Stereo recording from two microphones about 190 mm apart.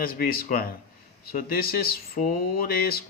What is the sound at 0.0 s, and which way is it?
Speech, 50° left (ahead or behind).